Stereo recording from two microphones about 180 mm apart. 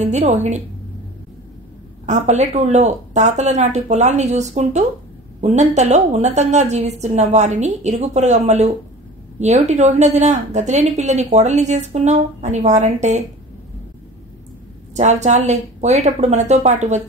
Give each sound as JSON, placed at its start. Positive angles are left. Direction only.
{"t": 0.0, "sound": "a woman's voice", "side_deg": -40}
{"t": 2.0, "sound": "a woman's voice", "side_deg": -40}
{"t": 15.0, "sound": "a woman's voice", "side_deg": -40}